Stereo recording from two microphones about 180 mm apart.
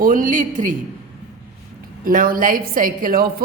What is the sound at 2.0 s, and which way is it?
Speech, 50° right (ahead or behind).